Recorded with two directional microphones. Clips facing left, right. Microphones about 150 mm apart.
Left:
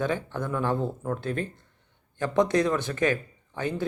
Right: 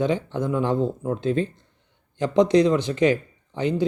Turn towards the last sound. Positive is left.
turn(degrees=-20)  # may be behind; listen again after turning